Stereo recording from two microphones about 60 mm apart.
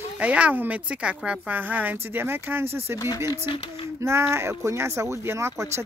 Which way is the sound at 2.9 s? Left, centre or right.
Left.